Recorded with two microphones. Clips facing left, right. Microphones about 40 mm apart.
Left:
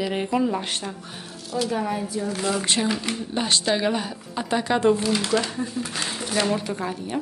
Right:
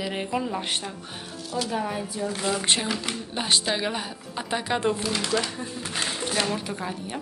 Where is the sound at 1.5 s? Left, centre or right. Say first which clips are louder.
Left 3 dB; centre.